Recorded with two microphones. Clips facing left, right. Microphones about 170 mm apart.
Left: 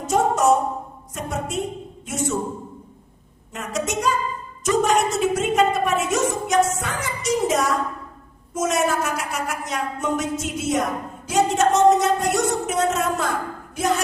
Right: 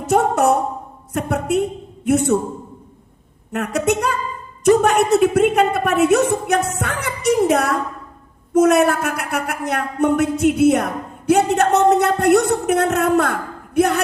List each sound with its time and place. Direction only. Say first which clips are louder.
0.1 s speech: right 2 dB; 60° right (ahead or behind)
3.5 s speech: right 7 dB; 65° right (ahead or behind)